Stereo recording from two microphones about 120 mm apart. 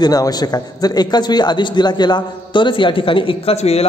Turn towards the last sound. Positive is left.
turn(degrees=60)  # may be behind; listen again after turning